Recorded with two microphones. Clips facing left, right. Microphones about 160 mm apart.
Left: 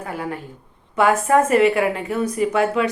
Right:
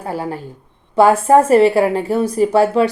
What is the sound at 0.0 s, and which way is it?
A woman's voice, 30° right (ahead or behind).